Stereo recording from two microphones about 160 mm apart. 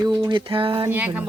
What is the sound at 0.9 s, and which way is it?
Speech, 10° right (ahead or behind).